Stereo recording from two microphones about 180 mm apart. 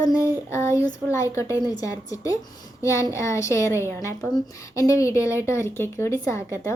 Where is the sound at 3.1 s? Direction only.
15° left (ahead or behind).